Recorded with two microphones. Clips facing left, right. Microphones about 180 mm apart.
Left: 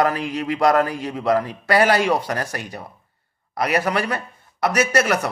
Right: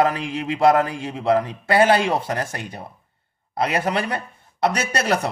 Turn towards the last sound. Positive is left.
turn(degrees=-30)  # may be behind; listen again after turning